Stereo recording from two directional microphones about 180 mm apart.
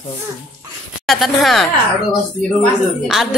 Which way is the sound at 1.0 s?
Centre (ahead or behind).